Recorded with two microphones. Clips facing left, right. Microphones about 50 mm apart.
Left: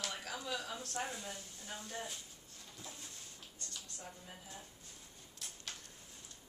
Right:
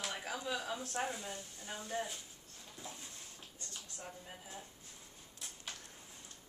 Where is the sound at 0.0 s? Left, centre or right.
Centre.